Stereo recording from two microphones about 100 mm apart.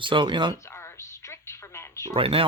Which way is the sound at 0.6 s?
25° left (ahead or behind).